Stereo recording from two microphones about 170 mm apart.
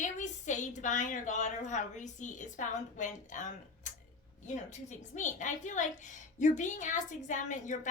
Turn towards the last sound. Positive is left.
turn(degrees=45)  # may be behind; listen again after turning